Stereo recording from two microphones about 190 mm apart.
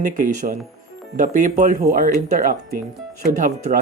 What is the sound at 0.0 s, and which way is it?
Speech, 40° right (ahead or behind).